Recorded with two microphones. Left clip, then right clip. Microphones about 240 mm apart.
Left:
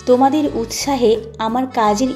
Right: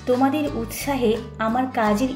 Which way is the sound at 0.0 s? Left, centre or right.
Left.